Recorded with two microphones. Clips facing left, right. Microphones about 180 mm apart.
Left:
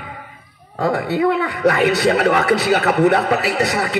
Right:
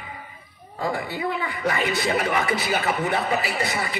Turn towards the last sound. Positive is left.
turn(degrees=70)  # may be behind; listen again after turning